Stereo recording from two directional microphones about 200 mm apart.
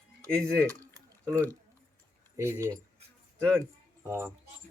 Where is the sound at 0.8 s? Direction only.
15° right (ahead or behind).